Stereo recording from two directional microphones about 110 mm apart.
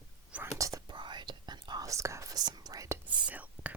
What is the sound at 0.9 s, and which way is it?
Whispering, 45° right (ahead or behind).